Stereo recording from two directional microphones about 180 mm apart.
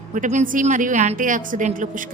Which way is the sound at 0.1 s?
45° right (ahead or behind).